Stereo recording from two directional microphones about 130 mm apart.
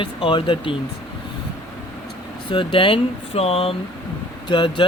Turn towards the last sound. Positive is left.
turn(degrees=40)  # may be behind; listen again after turning